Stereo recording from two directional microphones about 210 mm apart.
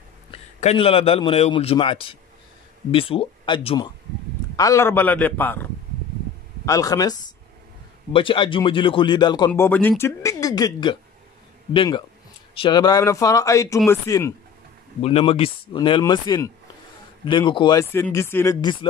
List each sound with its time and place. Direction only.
0.3 s a man's voice: 30° left (ahead or behind)
9.5 s speech: 10° left (ahead or behind)
15.0 s speech: 30° left (ahead or behind)